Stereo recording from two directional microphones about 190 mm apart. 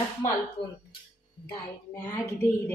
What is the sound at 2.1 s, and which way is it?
Speech, 15° left (ahead or behind).